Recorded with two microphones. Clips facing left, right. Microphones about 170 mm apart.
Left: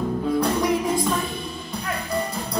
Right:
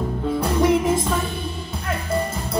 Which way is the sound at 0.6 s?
25° right (ahead or behind).